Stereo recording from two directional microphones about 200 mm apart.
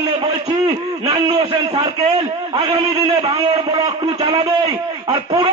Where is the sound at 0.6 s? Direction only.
25° right (ahead or behind).